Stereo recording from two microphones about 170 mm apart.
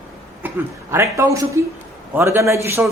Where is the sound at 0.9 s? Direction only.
15° right (ahead or behind).